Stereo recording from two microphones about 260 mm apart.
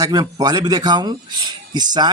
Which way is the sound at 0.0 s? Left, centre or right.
Centre.